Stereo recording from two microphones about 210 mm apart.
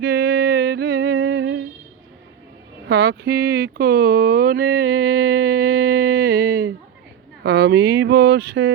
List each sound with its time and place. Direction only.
0.0 s music: 50° right (ahead or behind)
2.9 s mantra: 50° right (ahead or behind)
7.4 s speech: 50° right (ahead or behind)